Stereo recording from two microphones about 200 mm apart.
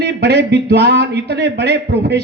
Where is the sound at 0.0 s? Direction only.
55° right (ahead or behind).